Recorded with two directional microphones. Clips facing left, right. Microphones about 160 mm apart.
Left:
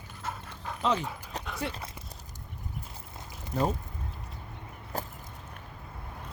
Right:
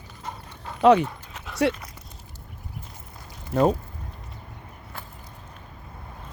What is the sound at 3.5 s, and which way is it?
Speech, 75° right (ahead or behind).